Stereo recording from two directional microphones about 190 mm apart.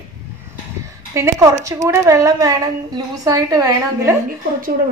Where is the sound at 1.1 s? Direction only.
15° right (ahead or behind).